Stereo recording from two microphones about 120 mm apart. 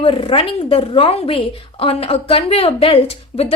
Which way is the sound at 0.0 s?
50° left (ahead or behind).